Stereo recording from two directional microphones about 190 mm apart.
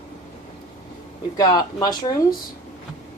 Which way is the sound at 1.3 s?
20° left (ahead or behind).